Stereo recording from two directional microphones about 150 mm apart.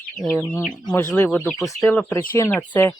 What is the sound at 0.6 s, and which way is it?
Speech, centre (ahead or behind).